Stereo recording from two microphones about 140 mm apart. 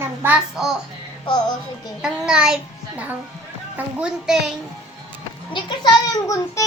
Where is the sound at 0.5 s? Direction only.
Centre (ahead or behind).